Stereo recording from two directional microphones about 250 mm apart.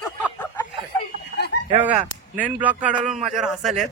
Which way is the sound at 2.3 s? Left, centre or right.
Centre.